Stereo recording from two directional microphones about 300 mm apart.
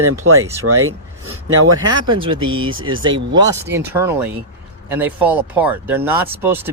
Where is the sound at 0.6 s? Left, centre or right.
Right.